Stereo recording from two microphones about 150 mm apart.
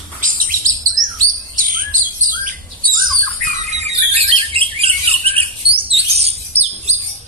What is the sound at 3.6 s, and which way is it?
Bird, 45° right (ahead or behind).